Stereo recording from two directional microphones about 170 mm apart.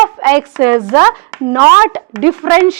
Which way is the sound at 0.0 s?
15° right (ahead or behind).